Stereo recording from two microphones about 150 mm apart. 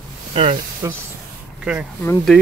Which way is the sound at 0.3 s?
40° right (ahead or behind).